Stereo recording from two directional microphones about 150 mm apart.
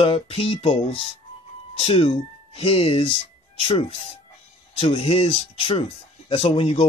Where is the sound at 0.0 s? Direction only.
40° left (ahead or behind).